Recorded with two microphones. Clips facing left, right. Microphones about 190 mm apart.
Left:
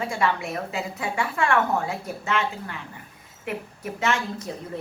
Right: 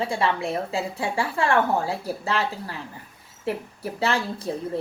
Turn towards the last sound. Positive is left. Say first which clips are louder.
# right 1 dB
turn(degrees=-30)  # may be behind; listen again after turning